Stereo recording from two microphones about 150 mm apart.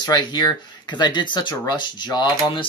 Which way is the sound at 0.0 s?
30° left (ahead or behind).